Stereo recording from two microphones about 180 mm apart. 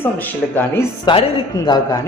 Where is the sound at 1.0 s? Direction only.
30° left (ahead or behind).